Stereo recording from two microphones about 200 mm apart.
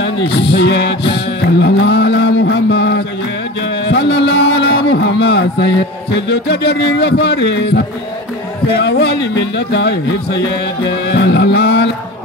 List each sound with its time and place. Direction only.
0.5 s speech: 55° left (ahead or behind)
1.1 s music: 55° left (ahead or behind)
6.1 s speech: 55° left (ahead or behind)